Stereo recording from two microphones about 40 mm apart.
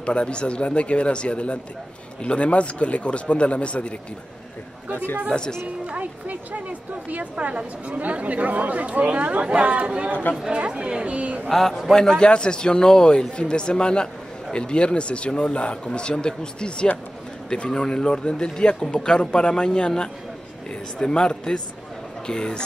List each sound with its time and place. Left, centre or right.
0.0 s a man's voice: left
4.9 s a woman's voice: left
5.3 s speech: left
5.9 s music: right
7.1 s speech: right
11.1 s speech: right
11.4 s a man's voice: centre; by 19.9 s left
21.0 s speech: left